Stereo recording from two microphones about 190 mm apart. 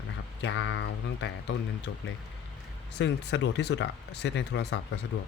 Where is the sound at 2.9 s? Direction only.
65° left (ahead or behind).